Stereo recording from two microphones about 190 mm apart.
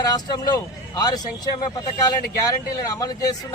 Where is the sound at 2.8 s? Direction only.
15° left (ahead or behind).